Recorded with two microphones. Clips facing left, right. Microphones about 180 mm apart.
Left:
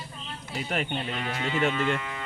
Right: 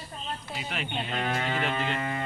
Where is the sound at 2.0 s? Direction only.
45° right (ahead or behind).